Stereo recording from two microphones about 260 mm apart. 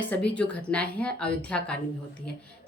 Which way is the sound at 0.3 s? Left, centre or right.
Centre.